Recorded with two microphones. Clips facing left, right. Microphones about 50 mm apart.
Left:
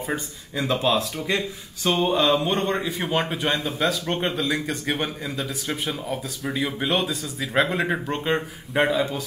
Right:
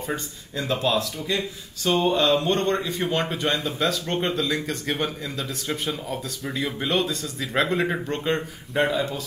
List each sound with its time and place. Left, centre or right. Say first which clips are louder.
0.0 s a man's voice: left 1 dB; centre
1.1 s speech: left 2 dB; left
2.0 s a man's voice: even; centre